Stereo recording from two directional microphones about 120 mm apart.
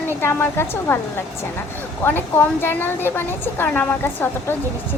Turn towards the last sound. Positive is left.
turn(degrees=20)  # may be behind; listen again after turning